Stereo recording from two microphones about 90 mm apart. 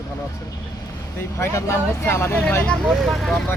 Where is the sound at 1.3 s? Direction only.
30° left (ahead or behind).